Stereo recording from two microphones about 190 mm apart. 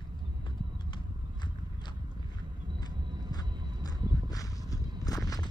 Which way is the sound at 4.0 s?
25° right (ahead or behind).